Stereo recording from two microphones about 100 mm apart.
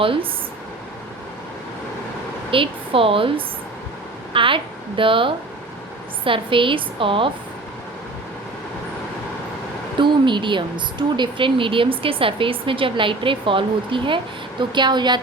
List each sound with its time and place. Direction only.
0.0 s speech: 65° right (ahead or behind)
2.5 s speech: 65° right (ahead or behind)
10.0 s a woman's voice: 55° right (ahead or behind)